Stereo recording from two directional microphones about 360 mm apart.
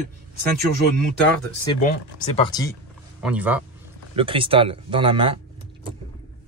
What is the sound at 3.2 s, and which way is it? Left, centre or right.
Speech, centre.